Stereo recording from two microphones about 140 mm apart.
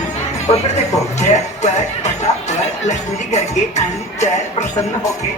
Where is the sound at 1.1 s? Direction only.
55° left (ahead or behind).